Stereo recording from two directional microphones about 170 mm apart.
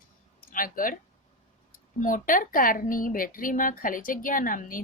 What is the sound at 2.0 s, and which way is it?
A woman's voice, 50° left (ahead or behind).